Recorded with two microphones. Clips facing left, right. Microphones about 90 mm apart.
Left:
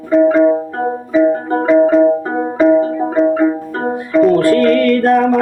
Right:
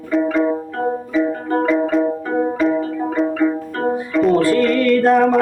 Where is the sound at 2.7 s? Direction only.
30° left (ahead or behind).